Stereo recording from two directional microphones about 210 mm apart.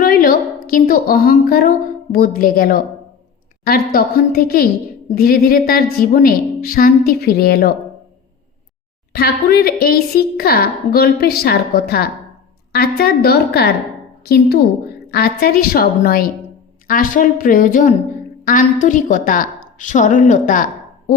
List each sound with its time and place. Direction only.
0.0 s a sound: 40° left (ahead or behind)
2.1 s a woman's voice: 45° left (ahead or behind)
9.1 s a woman's voice: 50° left (ahead or behind)